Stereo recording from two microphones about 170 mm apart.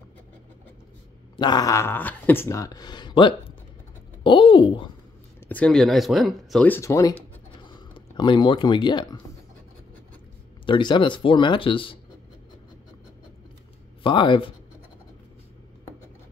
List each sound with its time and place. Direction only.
1.3 s speech: 25° left (ahead or behind)
5.5 s speech: 5° left (ahead or behind)
6.7 s speech: 15° left (ahead or behind)
10.6 s speech: 30° left (ahead or behind)
14.0 s speech: 30° left (ahead or behind)